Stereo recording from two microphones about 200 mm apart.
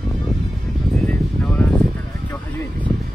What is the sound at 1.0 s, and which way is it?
Music, 10° left (ahead or behind).